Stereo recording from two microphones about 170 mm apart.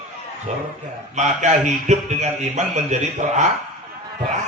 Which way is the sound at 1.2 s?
45° right (ahead or behind).